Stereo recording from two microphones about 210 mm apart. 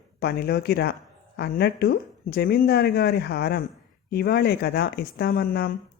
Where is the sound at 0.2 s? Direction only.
50° left (ahead or behind).